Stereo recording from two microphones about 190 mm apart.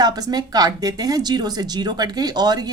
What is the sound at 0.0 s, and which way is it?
A woman's voice, 20° right (ahead or behind).